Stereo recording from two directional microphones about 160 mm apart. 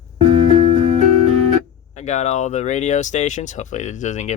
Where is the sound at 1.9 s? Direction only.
45° left (ahead or behind).